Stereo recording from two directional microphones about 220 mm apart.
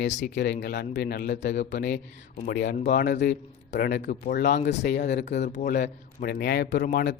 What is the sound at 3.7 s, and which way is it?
Speech, 40° left (ahead or behind).